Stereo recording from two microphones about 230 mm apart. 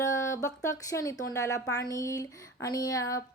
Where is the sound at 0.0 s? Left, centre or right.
Centre.